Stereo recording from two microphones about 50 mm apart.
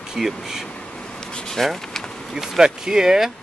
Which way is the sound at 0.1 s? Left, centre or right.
Centre.